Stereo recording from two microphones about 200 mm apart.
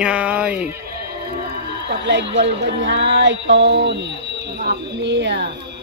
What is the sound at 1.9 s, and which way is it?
A woman's voice, 60° right (ahead or behind).